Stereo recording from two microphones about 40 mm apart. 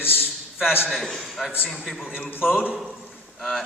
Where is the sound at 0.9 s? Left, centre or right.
Centre.